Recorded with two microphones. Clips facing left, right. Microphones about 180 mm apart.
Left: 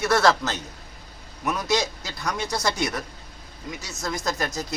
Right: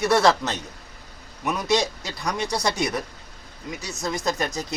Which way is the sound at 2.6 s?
5° left (ahead or behind).